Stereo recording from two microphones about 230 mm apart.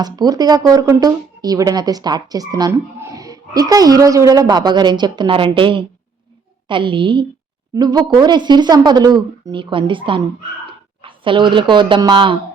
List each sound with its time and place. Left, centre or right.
0.0 s speech: centre